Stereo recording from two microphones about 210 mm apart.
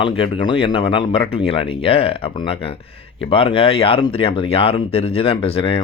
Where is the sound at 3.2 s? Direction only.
25° left (ahead or behind).